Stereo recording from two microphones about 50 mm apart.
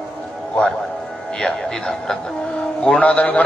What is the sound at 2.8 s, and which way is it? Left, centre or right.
Speech, left.